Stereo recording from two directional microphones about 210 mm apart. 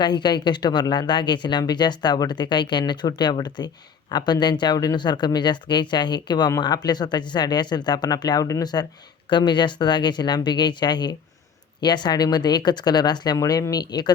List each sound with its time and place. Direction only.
0.0 s speech: 20° left (ahead or behind)